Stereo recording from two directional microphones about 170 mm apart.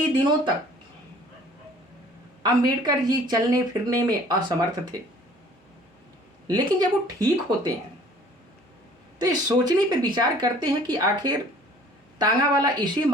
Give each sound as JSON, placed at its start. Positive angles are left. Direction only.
{"t": 2.4, "sound": "speech", "side_deg": -25}
{"t": 6.5, "sound": "speech", "side_deg": -25}
{"t": 9.1, "sound": "speech", "side_deg": -25}